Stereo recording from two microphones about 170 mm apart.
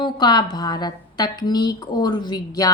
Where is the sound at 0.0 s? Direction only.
25° left (ahead or behind).